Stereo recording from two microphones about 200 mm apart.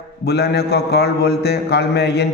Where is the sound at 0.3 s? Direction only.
55° left (ahead or behind).